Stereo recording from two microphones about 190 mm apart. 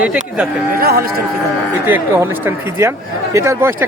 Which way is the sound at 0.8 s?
55° right (ahead or behind).